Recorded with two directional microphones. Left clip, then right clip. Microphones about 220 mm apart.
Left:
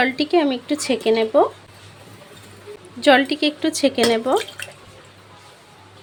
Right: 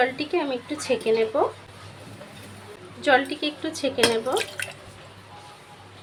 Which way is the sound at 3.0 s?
50° left (ahead or behind).